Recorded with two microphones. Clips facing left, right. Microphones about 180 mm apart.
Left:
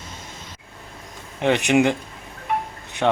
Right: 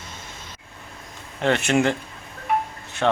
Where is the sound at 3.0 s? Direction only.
10° left (ahead or behind).